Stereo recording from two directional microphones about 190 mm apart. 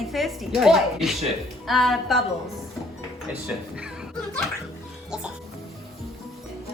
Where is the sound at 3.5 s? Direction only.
5° right (ahead or behind).